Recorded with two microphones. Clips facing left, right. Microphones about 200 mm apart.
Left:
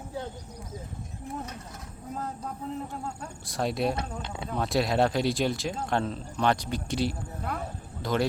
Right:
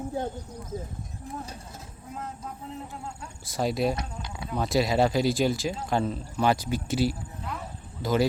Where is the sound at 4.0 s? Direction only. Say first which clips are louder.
Left 2 dB; 25° left (ahead or behind).